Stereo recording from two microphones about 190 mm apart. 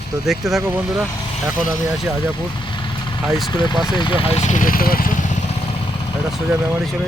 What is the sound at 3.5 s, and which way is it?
Speech, 25° left (ahead or behind).